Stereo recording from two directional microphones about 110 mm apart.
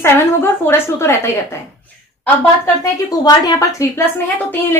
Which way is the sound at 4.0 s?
20° left (ahead or behind).